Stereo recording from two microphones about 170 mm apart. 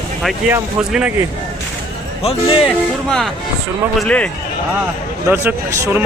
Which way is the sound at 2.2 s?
30° left (ahead or behind).